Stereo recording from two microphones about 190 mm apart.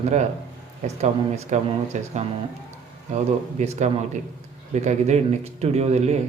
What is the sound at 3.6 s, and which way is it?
A man's voice, 35° right (ahead or behind).